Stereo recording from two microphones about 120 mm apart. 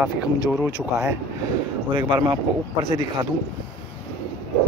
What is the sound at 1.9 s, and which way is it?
Speech, 40° right (ahead or behind).